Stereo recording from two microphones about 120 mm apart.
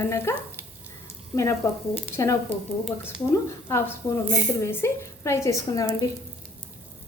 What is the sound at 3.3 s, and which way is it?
Speech, 25° left (ahead or behind).